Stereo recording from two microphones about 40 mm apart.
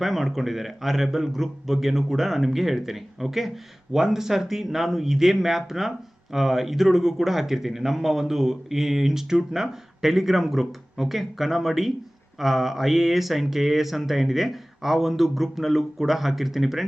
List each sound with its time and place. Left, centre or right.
0.0 s speech: centre